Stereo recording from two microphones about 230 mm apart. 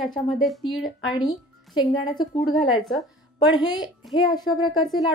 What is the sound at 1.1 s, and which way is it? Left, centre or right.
A woman's voice, centre.